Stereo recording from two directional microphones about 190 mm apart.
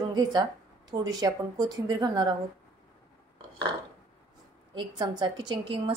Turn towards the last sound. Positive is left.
turn(degrees=-25)  # may be behind; listen again after turning